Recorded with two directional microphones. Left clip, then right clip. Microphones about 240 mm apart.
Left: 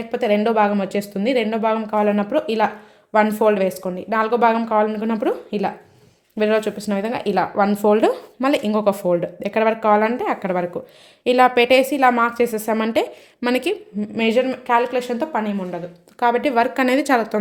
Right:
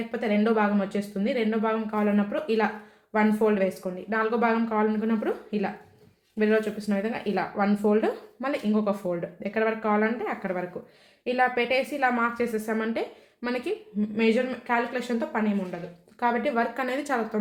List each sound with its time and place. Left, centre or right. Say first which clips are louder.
0.1 s speech: left 8 dB; left